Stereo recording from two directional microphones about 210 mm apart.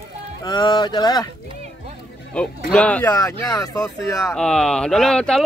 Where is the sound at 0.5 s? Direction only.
20° left (ahead or behind).